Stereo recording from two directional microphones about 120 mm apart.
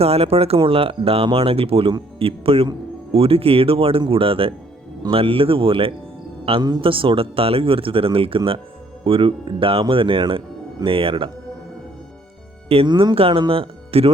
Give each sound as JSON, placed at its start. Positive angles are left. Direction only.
{"t": 0.0, "sound": "speech", "side_deg": -55}
{"t": 12.6, "sound": "speech", "side_deg": -55}
{"t": 12.9, "sound": "speech", "side_deg": -35}
{"t": 13.1, "sound": "speech", "side_deg": -50}